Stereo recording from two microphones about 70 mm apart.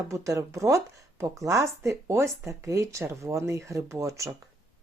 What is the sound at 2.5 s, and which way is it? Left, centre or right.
Speech, right.